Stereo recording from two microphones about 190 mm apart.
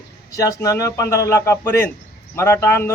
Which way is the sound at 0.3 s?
15° left (ahead or behind).